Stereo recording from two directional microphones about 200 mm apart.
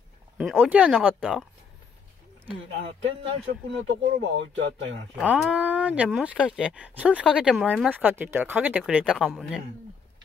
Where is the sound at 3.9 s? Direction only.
70° right (ahead or behind).